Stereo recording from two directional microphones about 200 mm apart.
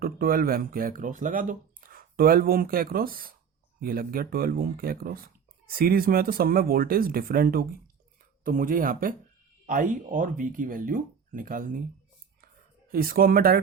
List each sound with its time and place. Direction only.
0.0 s speech: 45° right (ahead or behind)
12.9 s speech: 45° right (ahead or behind)